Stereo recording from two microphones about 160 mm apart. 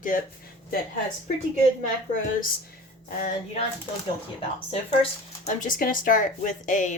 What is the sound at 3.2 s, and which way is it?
Speech, 50° left (ahead or behind).